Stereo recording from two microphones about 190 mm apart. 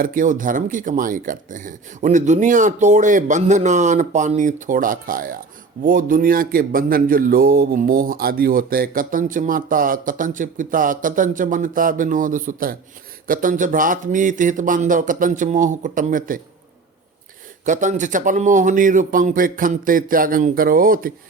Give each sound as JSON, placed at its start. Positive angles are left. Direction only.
{"t": 0.0, "sound": "a man's voice", "side_deg": -45}
{"t": 17.7, "sound": "a man's voice", "side_deg": -40}